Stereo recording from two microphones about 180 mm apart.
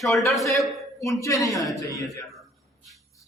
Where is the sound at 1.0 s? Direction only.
15° left (ahead or behind).